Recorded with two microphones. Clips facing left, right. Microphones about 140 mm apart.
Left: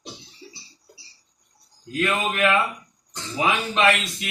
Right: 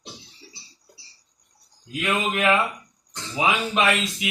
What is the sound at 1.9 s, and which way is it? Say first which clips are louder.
Speech: left 1 dB; 10° right (ahead or behind).